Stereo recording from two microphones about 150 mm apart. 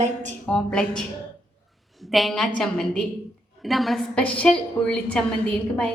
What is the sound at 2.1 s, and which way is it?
A woman's voice, centre (ahead or behind).